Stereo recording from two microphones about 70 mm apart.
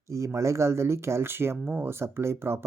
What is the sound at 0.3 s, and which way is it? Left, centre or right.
Speech, right.